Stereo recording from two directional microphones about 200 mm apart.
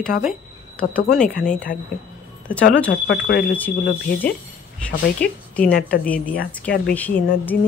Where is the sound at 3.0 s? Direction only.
60° left (ahead or behind).